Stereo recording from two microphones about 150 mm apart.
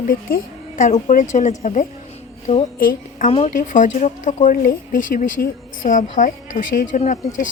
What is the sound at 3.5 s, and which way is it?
Speech, 60° left (ahead or behind).